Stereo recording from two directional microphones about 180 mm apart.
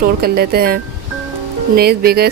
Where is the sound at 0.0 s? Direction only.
55° right (ahead or behind).